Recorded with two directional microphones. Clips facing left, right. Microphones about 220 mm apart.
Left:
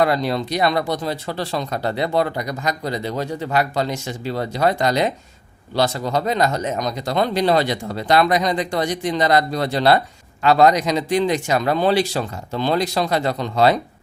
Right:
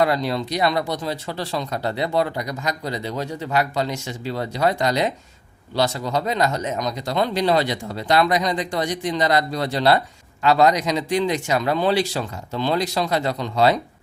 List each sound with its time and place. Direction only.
0.0 s speech: 50° left (ahead or behind)